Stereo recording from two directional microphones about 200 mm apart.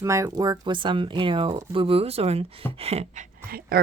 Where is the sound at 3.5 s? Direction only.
50° right (ahead or behind).